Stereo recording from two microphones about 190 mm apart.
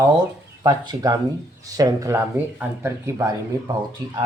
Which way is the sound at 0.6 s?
20° right (ahead or behind).